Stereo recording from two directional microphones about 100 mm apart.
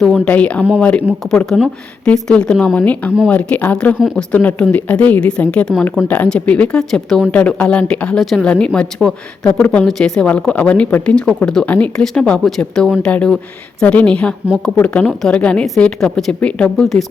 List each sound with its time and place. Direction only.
0.0 s a woman's voice: 10° left (ahead or behind)
3.9 s a woman's voice: 5° right (ahead or behind)
4.3 s a woman's voice: 15° left (ahead or behind)
8.2 s a woman's voice: centre (ahead or behind)
8.4 s a woman's voice: 10° left (ahead or behind)